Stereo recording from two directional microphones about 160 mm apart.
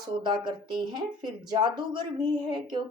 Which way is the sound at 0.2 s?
30° right (ahead or behind).